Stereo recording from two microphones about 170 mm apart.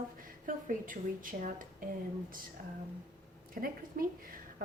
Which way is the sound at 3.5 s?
55° right (ahead or behind).